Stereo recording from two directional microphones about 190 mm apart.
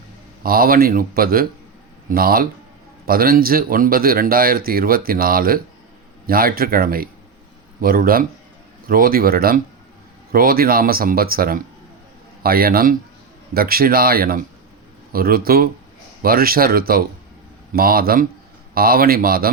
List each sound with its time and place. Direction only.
0.4 s speech: 50° right (ahead or behind)